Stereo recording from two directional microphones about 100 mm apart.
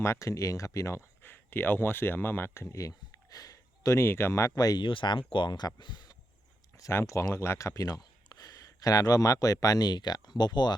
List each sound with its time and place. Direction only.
0.0 s speech: 30° left (ahead or behind)
4.5 s speech: 40° left (ahead or behind)
4.9 s speech: 55° left (ahead or behind)
6.7 s speech: 30° left (ahead or behind); by 10.8 s 45° left (ahead or behind)